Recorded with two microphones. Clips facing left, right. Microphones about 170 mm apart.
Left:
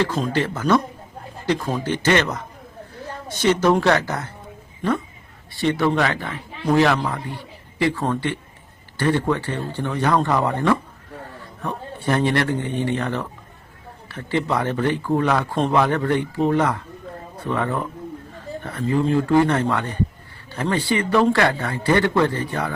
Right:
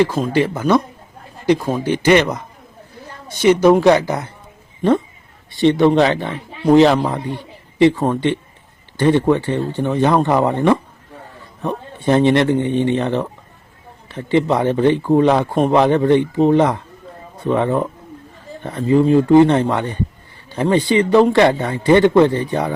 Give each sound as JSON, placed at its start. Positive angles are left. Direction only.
{"t": 0.0, "sound": "speech", "side_deg": -10}
{"t": 5.5, "sound": "speech", "side_deg": -20}